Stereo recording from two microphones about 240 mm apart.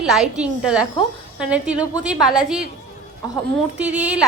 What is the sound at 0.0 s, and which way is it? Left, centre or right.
A woman's voice, centre.